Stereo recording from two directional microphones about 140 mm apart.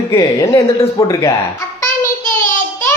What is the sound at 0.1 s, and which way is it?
Speech, 25° left (ahead or behind).